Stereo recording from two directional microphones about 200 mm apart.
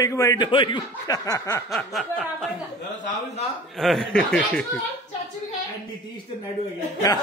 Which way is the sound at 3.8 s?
Centre (ahead or behind).